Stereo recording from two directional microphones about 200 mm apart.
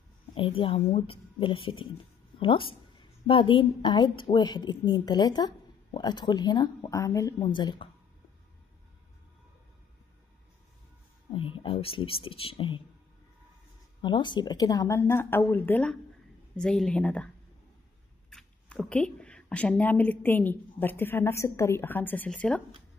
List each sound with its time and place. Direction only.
0.6 s a woman's voice: 25° left (ahead or behind)
11.3 s a woman's voice: 25° left (ahead or behind)
14.0 s a woman's voice: 20° left (ahead or behind); by 17.3 s 5° left (ahead or behind)
18.3 s a woman's voice: 5° left (ahead or behind)